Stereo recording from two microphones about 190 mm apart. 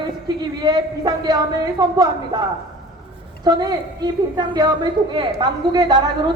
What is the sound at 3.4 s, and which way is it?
A woman's voice, 20° right (ahead or behind).